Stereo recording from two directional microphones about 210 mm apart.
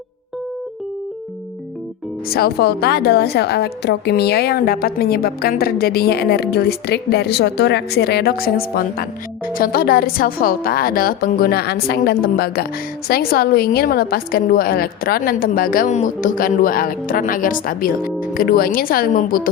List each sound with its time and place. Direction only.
2.3 s a woman's voice: 50° left (ahead or behind)